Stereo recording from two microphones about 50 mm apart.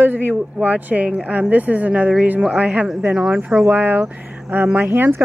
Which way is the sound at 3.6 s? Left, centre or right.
Right.